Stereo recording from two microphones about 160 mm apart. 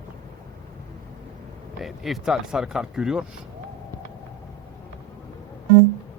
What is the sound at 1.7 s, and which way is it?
Speech, centre (ahead or behind).